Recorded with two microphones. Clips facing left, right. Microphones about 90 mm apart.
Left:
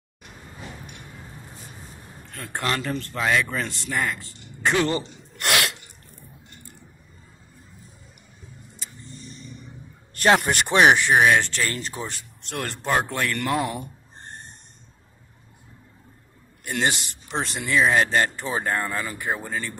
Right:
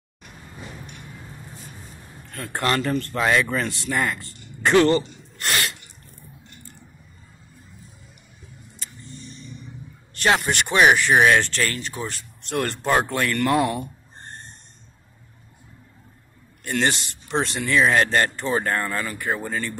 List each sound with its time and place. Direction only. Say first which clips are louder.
2.3 s speech: right 4 dB; centre (ahead or behind)
5.4 s sneeze: left 2 dB; 70° left (ahead or behind)
10.1 s speech: left 2 dB; 40° left (ahead or behind)
10.8 s speech: even; 20° left (ahead or behind)
11.1 s speech: right 1 dB; 5° left (ahead or behind)
11.7 s speech: even; 35° left (ahead or behind)
12.0 s speech: right 2 dB; 15° left (ahead or behind)
12.4 s speech: right 6 dB; centre (ahead or behind)
16.6 s speech: right 2 dB; 5° left (ahead or behind)
19.4 s speech: right 3 dB; 5° left (ahead or behind)